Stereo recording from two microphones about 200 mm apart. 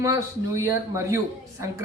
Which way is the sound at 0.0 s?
15° right (ahead or behind).